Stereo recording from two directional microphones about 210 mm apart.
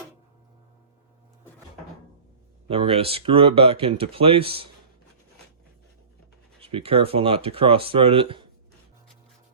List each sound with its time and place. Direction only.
2.6 s speech: 25° right (ahead or behind)
6.6 s speech: 25° right (ahead or behind)